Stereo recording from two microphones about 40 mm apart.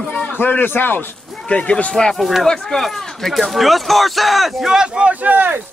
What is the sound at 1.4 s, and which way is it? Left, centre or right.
Speech, left.